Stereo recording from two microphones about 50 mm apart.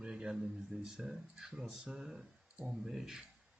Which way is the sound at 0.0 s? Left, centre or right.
Centre.